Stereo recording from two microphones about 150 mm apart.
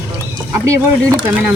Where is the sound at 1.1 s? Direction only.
10° right (ahead or behind).